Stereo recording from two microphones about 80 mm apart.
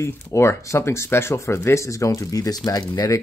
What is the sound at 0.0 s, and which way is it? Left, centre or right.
Speech, left.